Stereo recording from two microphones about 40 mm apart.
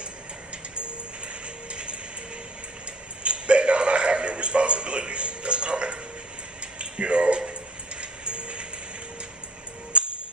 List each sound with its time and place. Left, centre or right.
1.7 s train: right
3.3 s a sound: right
8.0 s music: right
9.9 s music: right